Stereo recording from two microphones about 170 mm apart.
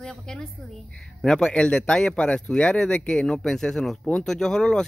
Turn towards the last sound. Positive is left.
turn(degrees=5)  # may be behind; listen again after turning